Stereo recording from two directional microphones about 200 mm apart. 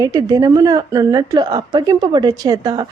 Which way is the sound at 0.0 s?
20° right (ahead or behind).